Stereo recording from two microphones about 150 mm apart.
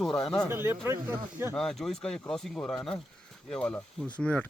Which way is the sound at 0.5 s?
15° right (ahead or behind).